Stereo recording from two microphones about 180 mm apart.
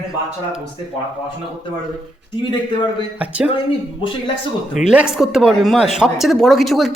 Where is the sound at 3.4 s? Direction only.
25° left (ahead or behind).